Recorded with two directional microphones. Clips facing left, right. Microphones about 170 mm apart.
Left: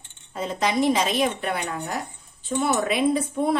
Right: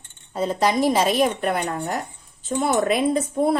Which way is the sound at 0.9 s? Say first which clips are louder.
Right 3 dB; 45° right (ahead or behind).